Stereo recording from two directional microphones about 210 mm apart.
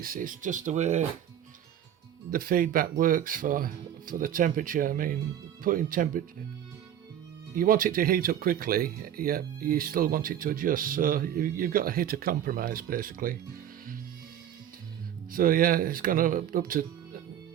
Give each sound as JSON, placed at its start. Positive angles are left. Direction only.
{"t": 0.0, "sound": "speech", "side_deg": -40}
{"t": 2.3, "sound": "speech", "side_deg": -45}
{"t": 7.5, "sound": "speech", "side_deg": -40}
{"t": 15.3, "sound": "speech", "side_deg": -40}